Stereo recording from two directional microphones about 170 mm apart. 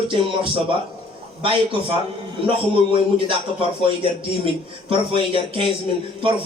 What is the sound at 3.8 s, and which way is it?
Speech, 30° right (ahead or behind).